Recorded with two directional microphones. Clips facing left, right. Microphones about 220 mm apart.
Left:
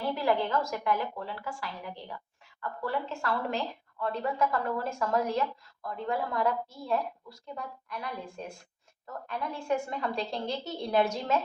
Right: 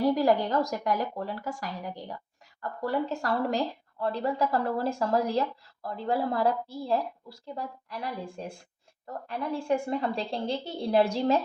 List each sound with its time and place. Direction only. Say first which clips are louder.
0.0 s speech: right 5 dB; 40° right (ahead or behind)